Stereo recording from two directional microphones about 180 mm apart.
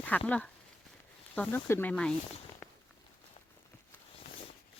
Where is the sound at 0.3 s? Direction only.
5° left (ahead or behind).